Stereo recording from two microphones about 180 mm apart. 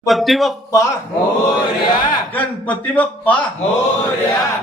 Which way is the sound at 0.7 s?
15° left (ahead or behind).